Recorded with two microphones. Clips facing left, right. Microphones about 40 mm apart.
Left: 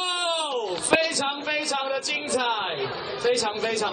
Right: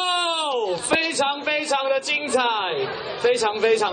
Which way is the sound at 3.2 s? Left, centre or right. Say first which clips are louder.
Right 5 dB; right.